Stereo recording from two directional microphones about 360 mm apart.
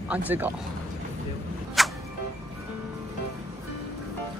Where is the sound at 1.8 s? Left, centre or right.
Centre.